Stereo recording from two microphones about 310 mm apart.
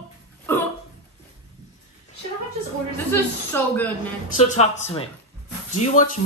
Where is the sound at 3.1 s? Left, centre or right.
Centre.